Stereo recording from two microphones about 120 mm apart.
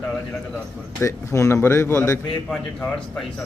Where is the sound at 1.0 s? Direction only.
25° left (ahead or behind).